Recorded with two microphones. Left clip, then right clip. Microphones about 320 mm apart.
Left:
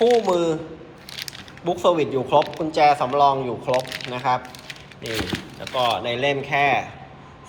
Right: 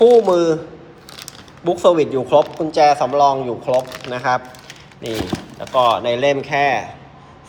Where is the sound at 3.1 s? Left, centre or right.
Centre.